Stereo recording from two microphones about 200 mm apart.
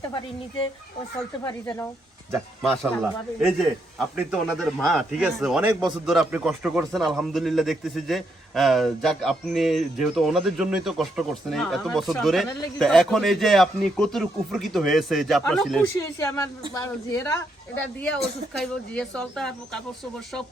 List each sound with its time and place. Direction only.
2.6 s a man's voice: centre (ahead or behind)
16.0 s speech: 15° left (ahead or behind)
18.6 s a man's voice: 5° left (ahead or behind)